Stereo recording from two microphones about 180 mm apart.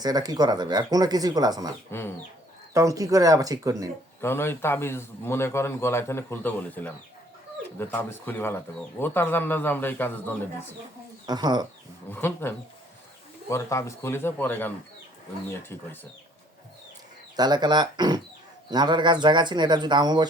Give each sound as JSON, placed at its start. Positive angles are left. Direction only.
{"t": 0.0, "sound": "speech", "side_deg": -20}
{"t": 1.9, "sound": "a man's voice", "side_deg": 10}
{"t": 2.7, "sound": "speech", "side_deg": -20}
{"t": 4.2, "sound": "a man's voice", "side_deg": 15}
{"t": 11.3, "sound": "speech", "side_deg": -25}
{"t": 12.1, "sound": "a man's voice", "side_deg": 10}
{"t": 15.7, "sound": "a man's voice", "side_deg": 15}
{"t": 17.3, "sound": "speech", "side_deg": -20}